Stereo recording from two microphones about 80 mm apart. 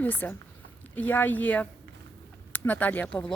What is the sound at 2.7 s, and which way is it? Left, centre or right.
Speech, centre.